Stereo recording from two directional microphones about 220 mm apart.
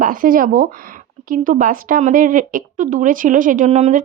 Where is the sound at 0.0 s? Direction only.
40° right (ahead or behind).